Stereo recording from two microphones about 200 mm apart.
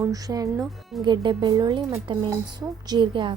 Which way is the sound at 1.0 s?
25° right (ahead or behind).